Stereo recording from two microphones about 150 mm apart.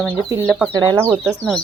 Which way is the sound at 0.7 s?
25° right (ahead or behind).